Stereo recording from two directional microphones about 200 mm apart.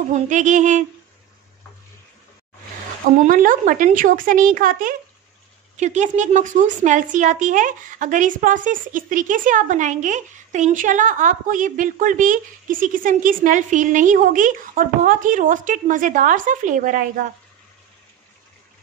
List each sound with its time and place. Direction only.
0.1 s a woman's voice: 40° right (ahead or behind)
3.3 s a woman's voice: 40° right (ahead or behind)